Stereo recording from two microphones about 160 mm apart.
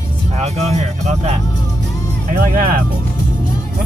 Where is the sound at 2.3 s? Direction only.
60° right (ahead or behind).